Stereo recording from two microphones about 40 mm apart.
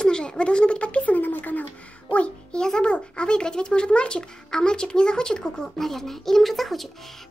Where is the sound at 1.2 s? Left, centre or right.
Left.